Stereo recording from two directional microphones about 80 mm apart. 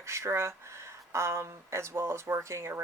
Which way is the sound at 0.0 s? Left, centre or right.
Right.